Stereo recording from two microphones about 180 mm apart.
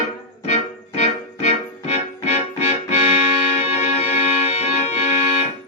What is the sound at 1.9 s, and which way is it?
Music, 35° left (ahead or behind).